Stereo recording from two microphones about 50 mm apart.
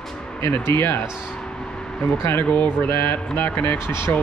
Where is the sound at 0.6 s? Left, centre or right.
Left.